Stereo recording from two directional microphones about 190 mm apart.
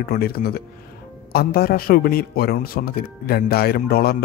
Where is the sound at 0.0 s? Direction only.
55° left (ahead or behind).